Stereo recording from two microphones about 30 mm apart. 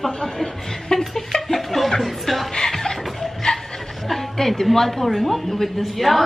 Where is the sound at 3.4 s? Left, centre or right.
Left.